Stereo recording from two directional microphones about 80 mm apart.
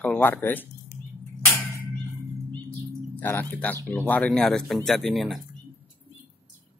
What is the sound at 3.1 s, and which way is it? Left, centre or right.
Speech, left.